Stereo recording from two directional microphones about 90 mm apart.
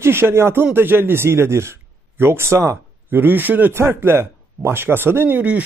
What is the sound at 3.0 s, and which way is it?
A man's voice, 20° right (ahead or behind).